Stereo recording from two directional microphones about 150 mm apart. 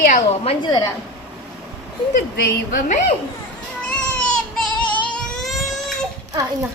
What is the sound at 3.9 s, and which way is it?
Baby cry, 10° left (ahead or behind).